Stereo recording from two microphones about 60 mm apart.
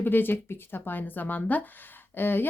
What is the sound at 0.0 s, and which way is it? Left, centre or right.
A woman's voice, left.